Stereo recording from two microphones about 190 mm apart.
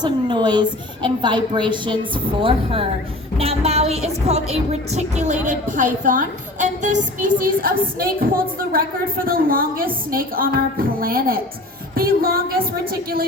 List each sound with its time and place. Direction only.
0.0 s a woman's voice: 25° right (ahead or behind); by 13.2 s 50° right (ahead or behind)